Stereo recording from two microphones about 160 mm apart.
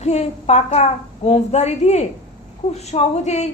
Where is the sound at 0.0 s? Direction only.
40° left (ahead or behind).